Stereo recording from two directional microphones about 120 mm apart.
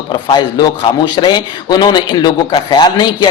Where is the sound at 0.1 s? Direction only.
35° left (ahead or behind).